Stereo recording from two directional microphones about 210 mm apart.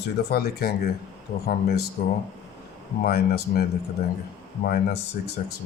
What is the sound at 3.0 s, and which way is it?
Speech, 50° left (ahead or behind).